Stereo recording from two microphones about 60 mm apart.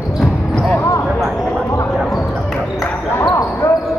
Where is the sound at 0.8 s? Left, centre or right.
Left.